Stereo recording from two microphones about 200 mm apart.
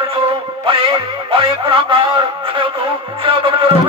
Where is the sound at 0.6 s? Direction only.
25° right (ahead or behind).